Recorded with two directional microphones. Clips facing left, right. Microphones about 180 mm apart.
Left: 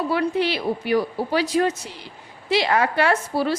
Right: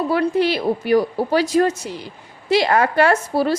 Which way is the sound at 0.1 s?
45° right (ahead or behind).